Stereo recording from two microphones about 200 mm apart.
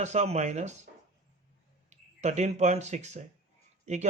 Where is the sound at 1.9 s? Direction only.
35° right (ahead or behind).